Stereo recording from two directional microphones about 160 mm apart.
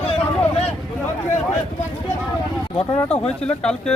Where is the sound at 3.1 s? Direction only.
5° left (ahead or behind).